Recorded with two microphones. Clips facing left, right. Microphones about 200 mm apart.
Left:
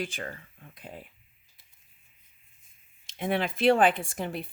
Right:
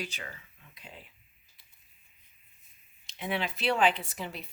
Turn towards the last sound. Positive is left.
turn(degrees=50)  # may be behind; listen again after turning